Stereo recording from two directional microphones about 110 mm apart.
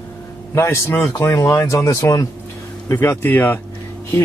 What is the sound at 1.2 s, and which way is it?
A man's voice, 35° left (ahead or behind).